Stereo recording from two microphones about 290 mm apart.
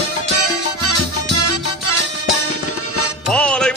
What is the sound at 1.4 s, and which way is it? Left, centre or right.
Music, left.